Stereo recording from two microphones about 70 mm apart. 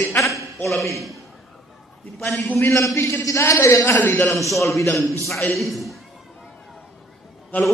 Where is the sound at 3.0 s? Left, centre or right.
Left.